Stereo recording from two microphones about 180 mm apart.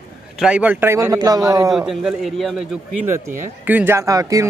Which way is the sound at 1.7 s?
Centre (ahead or behind).